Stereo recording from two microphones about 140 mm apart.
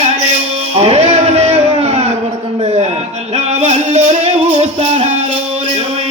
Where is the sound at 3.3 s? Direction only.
55° right (ahead or behind).